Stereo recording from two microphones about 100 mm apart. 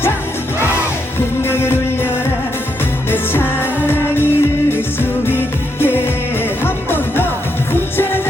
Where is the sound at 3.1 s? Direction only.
20° left (ahead or behind).